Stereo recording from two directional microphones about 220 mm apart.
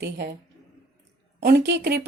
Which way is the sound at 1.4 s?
50° right (ahead or behind).